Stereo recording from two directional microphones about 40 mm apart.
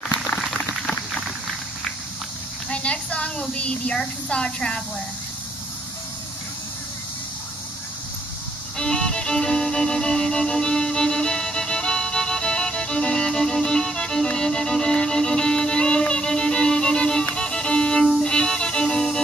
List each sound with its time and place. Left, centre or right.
2.7 s a woman's voice: left
3.9 s a woman's voice: centre
8.7 s music: centre